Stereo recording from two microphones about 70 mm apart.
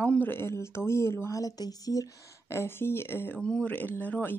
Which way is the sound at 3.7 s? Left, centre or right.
Left.